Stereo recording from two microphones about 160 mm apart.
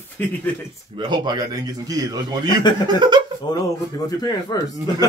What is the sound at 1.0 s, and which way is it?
Speech, 25° right (ahead or behind).